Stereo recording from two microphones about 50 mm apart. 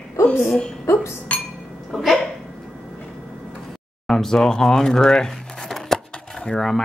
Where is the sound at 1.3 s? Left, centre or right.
Left.